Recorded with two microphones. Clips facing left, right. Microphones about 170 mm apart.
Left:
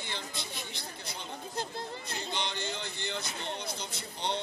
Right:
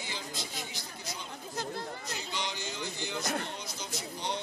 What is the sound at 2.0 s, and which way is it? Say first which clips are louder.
Speech: left 1 dB; 60° left (ahead or behind).